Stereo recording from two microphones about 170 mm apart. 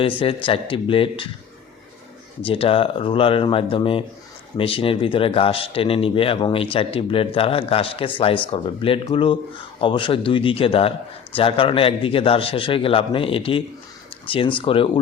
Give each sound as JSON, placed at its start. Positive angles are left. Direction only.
{"t": 0.0, "sound": "speech", "side_deg": 30}
{"t": 2.4, "sound": "speech", "side_deg": 35}